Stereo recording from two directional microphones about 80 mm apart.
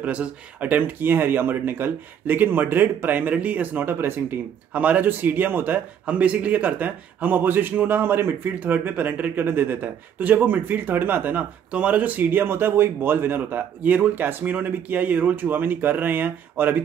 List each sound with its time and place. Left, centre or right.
0.0 s a man's voice: centre